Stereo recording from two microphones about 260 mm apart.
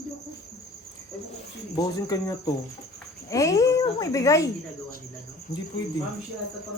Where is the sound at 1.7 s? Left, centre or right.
Centre.